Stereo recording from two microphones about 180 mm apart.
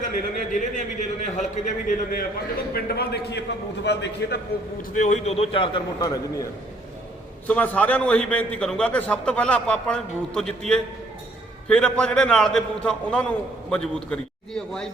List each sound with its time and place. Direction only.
0.1 s a man's voice: 45° left (ahead or behind)
2.7 s a man's voice: 60° left (ahead or behind)
4.8 s a man's voice: 40° left (ahead or behind); by 6.5 s 20° left (ahead or behind)
7.4 s a man's voice: 10° left (ahead or behind)